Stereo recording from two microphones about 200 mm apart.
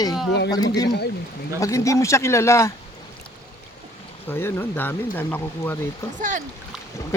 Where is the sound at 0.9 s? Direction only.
55° left (ahead or behind).